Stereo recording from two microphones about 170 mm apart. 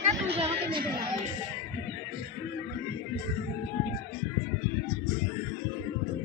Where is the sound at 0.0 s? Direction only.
35° right (ahead or behind).